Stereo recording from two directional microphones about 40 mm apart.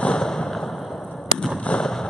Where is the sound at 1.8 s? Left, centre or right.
Centre.